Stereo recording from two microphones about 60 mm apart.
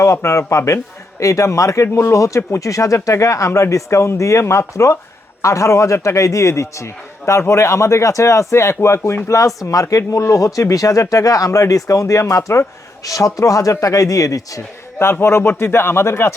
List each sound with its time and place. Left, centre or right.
0.0 s speech: left
9.6 s speech: left
13.1 s speech: left
14.9 s speech: left